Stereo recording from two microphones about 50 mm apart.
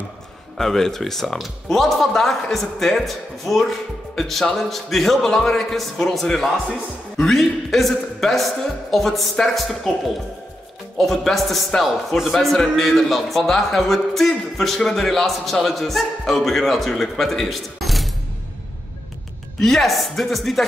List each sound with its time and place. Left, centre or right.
0.6 s a man's voice: centre
11.0 s a man's voice: centre
19.6 s a man's voice: centre